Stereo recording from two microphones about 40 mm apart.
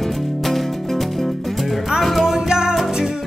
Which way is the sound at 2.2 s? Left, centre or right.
Centre.